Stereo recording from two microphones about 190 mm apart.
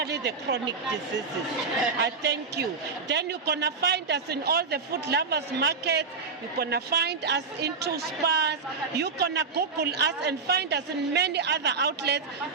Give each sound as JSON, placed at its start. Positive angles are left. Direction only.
{"t": 0.0, "sound": "speech", "side_deg": -60}
{"t": 2.0, "sound": "a woman's voice", "side_deg": -65}